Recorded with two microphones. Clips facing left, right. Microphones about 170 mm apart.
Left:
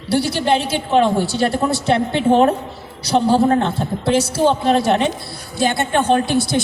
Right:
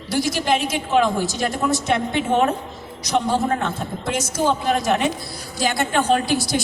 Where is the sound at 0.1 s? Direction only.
30° left (ahead or behind).